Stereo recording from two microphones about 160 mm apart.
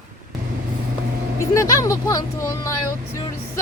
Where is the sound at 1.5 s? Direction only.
20° left (ahead or behind).